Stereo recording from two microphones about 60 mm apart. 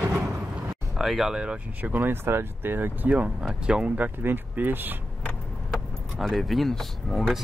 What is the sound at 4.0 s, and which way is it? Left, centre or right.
Speech, right.